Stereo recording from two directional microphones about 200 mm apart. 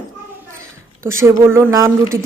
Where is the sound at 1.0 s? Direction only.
15° right (ahead or behind).